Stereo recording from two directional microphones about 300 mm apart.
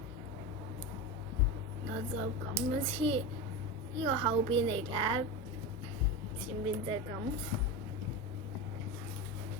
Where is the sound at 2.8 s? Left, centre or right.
Centre.